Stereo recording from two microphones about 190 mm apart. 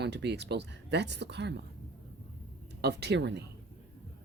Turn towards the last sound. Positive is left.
turn(degrees=-65)  # may be behind; listen again after turning